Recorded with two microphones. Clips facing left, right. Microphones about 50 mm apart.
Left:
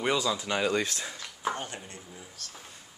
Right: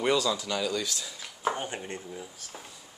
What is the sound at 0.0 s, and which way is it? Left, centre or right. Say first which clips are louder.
Speech: right 2 dB; centre.